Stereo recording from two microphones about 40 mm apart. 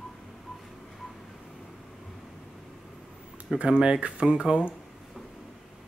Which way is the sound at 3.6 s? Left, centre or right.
Right.